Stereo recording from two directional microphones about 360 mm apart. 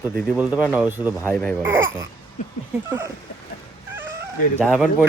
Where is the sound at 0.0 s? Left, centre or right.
Centre.